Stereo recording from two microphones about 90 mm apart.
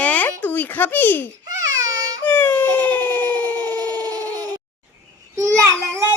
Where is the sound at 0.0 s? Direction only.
15° left (ahead or behind).